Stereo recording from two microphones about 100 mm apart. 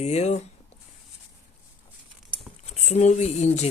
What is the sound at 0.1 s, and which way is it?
Speech, 90° left.